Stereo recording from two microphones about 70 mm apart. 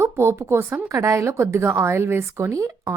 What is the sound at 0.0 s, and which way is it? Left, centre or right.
A woman's voice, right.